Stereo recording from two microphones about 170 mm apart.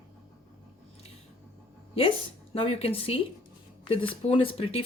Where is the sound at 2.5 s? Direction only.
35° left (ahead or behind).